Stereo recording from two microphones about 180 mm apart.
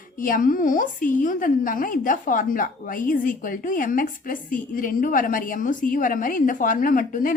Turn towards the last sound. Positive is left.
turn(degrees=50)  # may be behind; listen again after turning